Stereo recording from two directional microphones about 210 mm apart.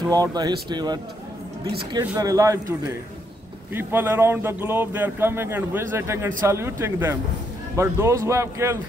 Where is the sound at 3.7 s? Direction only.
10° right (ahead or behind).